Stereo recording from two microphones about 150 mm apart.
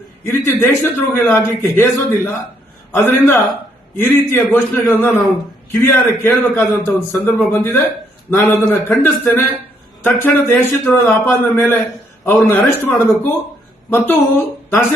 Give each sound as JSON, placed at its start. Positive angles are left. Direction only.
{"t": 0.3, "sound": "a man's voice", "side_deg": 15}